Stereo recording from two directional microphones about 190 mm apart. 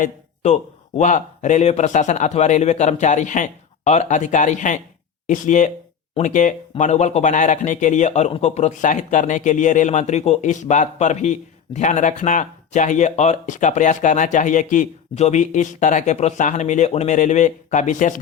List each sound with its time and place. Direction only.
0.0 s speech: 35° left (ahead or behind)